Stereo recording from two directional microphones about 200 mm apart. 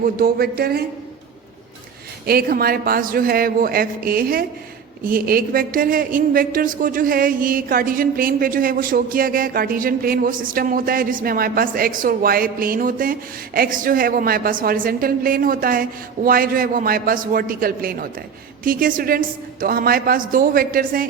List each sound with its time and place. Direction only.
0.2 s a woman's voice: 50° right (ahead or behind)
2.2 s a woman's voice: 50° right (ahead or behind)